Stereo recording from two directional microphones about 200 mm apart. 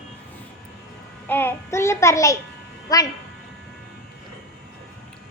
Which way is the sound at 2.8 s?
20° left (ahead or behind).